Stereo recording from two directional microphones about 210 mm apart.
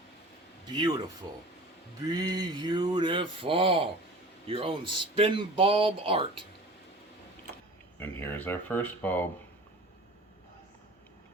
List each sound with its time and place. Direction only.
0.8 s speech: 20° right (ahead or behind)
7.9 s speech: 10° left (ahead or behind)